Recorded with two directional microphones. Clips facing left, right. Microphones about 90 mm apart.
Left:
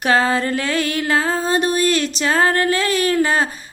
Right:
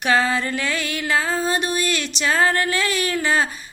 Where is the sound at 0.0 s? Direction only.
35° left (ahead or behind).